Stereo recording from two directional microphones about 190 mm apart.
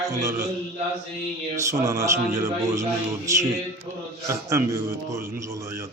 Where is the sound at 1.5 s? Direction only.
15° right (ahead or behind).